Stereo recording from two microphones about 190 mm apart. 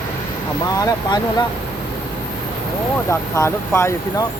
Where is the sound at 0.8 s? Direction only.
20° left (ahead or behind).